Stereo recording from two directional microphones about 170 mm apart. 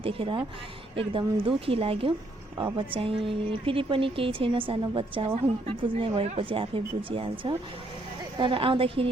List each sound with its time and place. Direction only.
0.0 s a woman's voice: 30° right (ahead or behind)